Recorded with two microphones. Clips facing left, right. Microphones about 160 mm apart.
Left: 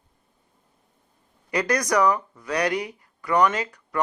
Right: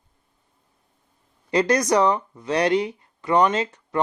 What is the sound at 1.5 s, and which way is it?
Speech, 25° right (ahead or behind).